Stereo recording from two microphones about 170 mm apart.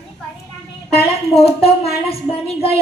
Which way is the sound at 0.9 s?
35° left (ahead or behind).